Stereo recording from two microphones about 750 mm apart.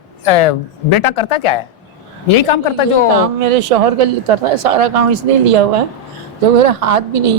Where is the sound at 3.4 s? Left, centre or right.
Right.